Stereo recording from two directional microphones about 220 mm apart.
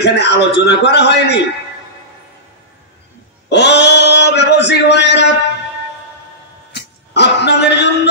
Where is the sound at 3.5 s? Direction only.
50° left (ahead or behind).